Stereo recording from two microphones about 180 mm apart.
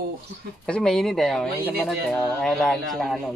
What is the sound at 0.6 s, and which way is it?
Speech, 5° left (ahead or behind).